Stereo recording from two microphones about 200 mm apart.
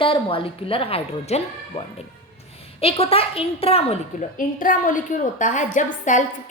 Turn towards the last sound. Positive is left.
turn(degrees=40)  # may be behind; listen again after turning